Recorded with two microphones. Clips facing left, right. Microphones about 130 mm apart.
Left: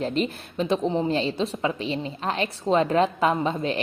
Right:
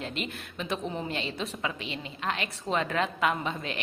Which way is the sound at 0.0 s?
35° left (ahead or behind).